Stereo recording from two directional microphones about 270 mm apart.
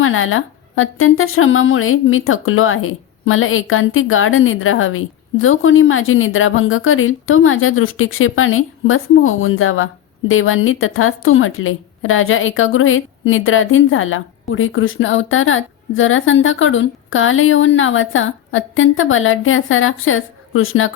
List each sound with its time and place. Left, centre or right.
0.0 s a woman's voice: left